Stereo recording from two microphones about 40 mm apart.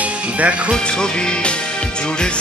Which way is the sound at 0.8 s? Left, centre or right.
Left.